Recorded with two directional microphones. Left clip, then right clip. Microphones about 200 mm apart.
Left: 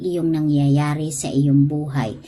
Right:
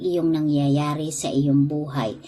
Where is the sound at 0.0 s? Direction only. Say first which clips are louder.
Left 1 dB; 10° left (ahead or behind).